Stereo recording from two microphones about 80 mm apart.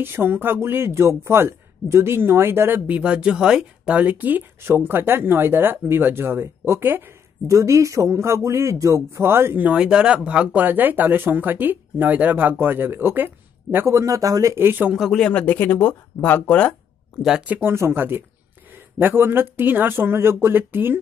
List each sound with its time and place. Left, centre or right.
0.0 s speech: right
3.0 s speech: centre
7.4 s speech: right
9.6 s speech: centre
13.9 s speech: right
14.6 s speech: right
15.0 s speech: centre
17.2 s speech: centre
17.6 s speech: right